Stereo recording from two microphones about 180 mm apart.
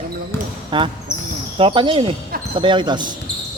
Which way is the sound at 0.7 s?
25° right (ahead or behind).